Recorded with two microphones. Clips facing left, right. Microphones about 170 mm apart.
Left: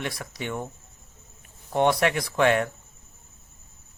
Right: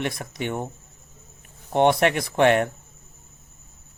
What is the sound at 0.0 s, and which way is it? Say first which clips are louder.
Speech: right 4 dB; 50° right (ahead or behind).